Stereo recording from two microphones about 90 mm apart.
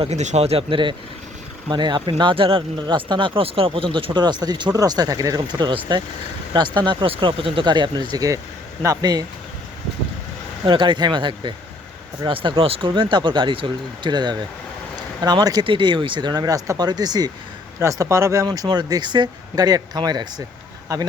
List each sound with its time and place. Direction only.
0.5 s speech: 70° right (ahead or behind)
1.7 s speech: 55° right (ahead or behind); by 2.6 s 85° right
2.8 s speech: 60° right (ahead or behind)
10.7 s speech: 65° right (ahead or behind); by 12.9 s 90° right
12.9 s speech: 60° right (ahead or behind)
14.1 s speech: 55° right (ahead or behind)
15.6 s speech: 65° right (ahead or behind); by 17.3 s 50° right (ahead or behind)
17.7 s speech: 35° right (ahead or behind)
18.4 s speech: 50° right (ahead or behind)